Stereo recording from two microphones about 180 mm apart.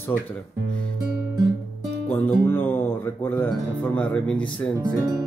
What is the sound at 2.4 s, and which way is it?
Speech, 10° left (ahead or behind).